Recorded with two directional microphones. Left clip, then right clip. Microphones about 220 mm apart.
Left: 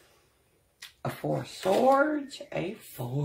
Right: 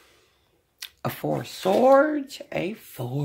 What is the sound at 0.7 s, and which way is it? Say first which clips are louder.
Speech: right 5 dB; 35° right (ahead or behind).